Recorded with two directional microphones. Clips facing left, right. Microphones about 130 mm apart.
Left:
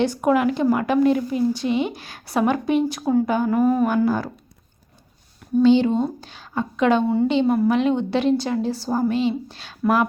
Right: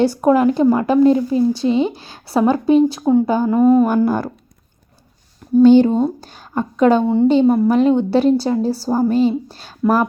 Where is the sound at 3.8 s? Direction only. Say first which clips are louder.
Right 3 dB; 50° right (ahead or behind).